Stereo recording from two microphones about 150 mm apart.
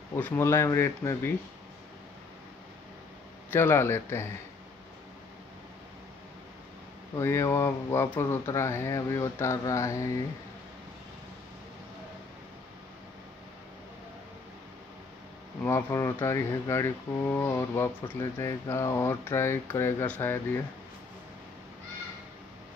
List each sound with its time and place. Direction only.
0.1 s speech: 15° left (ahead or behind)
3.5 s speech: 15° left (ahead or behind)
7.2 s speech: 20° left (ahead or behind)
15.6 s speech: 20° left (ahead or behind)